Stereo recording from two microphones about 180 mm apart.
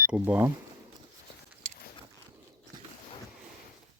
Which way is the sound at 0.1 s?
10° right (ahead or behind).